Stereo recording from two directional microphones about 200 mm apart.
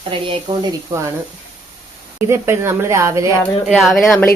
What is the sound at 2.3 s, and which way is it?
A woman's voice, 15° right (ahead or behind).